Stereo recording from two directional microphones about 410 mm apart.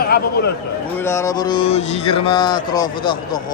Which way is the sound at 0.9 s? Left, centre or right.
Centre.